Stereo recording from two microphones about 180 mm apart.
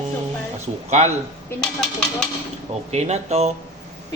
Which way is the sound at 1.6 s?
5° left (ahead or behind).